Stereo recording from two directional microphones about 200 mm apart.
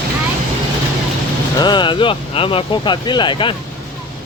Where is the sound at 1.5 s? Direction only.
20° left (ahead or behind).